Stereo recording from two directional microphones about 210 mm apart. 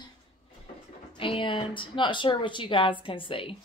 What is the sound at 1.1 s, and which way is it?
A woman's voice, 25° left (ahead or behind).